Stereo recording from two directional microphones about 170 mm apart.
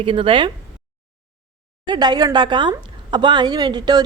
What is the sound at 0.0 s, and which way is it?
Speech, 30° right (ahead or behind).